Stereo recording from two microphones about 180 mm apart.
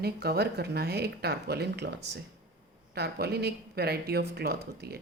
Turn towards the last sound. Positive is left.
turn(degrees=-65)  # may be behind; listen again after turning